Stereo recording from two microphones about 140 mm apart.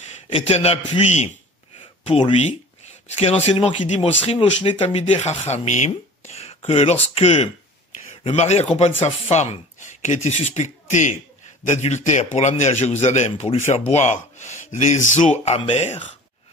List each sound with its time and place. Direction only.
0.3 s speech: 50° left (ahead or behind)
2.0 s speech: 45° left (ahead or behind)